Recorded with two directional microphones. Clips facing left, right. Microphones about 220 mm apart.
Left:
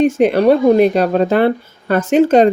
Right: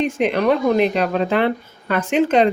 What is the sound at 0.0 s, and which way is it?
A woman's voice, 40° left (ahead or behind).